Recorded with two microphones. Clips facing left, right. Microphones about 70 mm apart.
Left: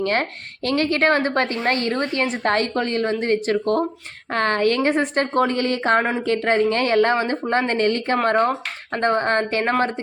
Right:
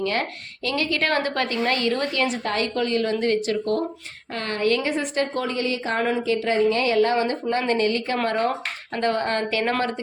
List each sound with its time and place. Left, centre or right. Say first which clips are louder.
0.0 s speech: left 3 dB; left
4.3 s a woman's voice: left 4 dB; left